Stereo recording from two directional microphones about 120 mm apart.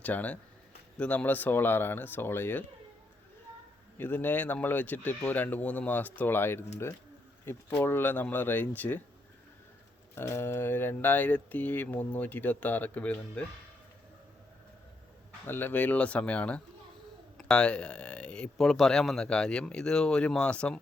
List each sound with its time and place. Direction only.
0.0 s speech: 15° left (ahead or behind)
3.9 s speech: 15° left (ahead or behind)
7.7 s speech: 15° left (ahead or behind)
10.2 s speech: 20° left (ahead or behind)
15.4 s speech: 15° left (ahead or behind)